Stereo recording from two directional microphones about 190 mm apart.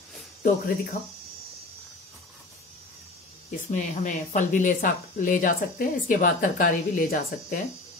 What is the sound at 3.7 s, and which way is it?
Speech, 40° left (ahead or behind).